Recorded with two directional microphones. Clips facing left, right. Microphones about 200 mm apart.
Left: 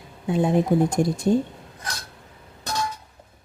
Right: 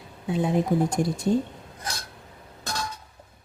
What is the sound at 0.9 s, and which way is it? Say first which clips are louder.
Speech: left 3 dB; 45° left (ahead or behind).